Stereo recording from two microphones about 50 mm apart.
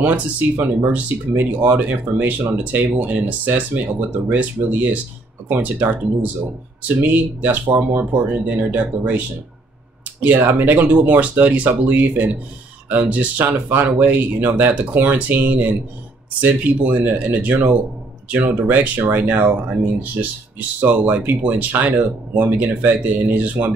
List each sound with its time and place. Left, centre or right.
0.0 s speech: right
7.6 s speech: right
8.0 s speech: right
10.2 s speech: right